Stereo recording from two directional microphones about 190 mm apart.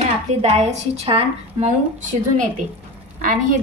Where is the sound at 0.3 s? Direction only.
35° right (ahead or behind).